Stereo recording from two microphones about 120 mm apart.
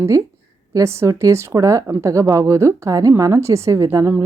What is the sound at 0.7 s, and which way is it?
Speech, 25° right (ahead or behind).